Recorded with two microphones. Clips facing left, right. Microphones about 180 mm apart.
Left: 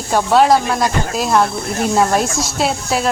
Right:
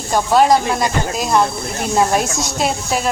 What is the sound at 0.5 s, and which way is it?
Speech, 15° right (ahead or behind).